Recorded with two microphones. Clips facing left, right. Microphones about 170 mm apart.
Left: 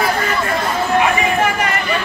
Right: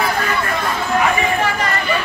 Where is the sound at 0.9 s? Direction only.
15° left (ahead or behind).